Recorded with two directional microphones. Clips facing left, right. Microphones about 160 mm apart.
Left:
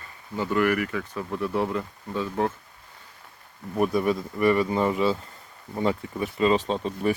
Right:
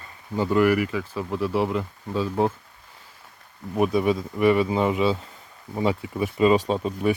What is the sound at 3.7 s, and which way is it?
Speech, 15° right (ahead or behind).